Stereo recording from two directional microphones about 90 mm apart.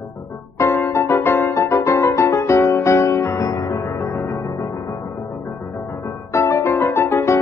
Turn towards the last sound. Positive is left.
turn(degrees=30)  # may be behind; listen again after turning